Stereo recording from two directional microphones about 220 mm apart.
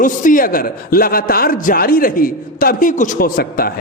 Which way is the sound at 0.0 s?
35° left (ahead or behind).